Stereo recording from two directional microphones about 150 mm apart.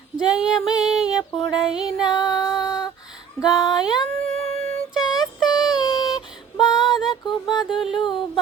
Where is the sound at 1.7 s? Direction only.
5° right (ahead or behind).